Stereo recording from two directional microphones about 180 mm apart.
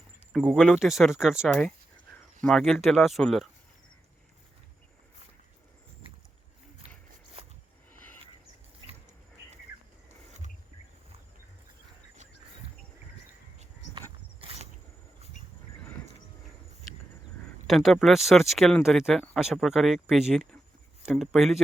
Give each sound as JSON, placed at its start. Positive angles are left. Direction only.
{"t": 0.3, "sound": "speech", "side_deg": 0}
{"t": 7.9, "sound": "a sound", "side_deg": 10}
{"t": 14.4, "sound": "mechanisms", "side_deg": -35}
{"t": 17.7, "sound": "speech", "side_deg": 0}